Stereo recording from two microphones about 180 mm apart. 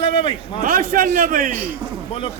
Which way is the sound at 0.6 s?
50° right (ahead or behind).